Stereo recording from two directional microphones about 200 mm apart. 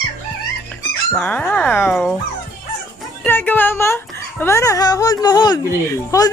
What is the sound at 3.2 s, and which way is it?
Speech, 10° left (ahead or behind).